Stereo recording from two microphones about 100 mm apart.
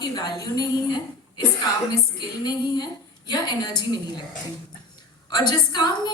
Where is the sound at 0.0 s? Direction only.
45° left (ahead or behind).